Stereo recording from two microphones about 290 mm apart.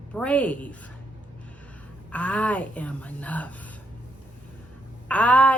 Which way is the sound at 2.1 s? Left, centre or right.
Centre.